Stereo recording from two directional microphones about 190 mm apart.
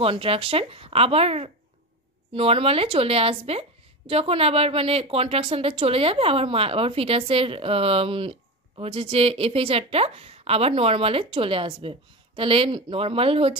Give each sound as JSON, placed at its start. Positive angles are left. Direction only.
{"t": 0.0, "sound": "speech", "side_deg": -30}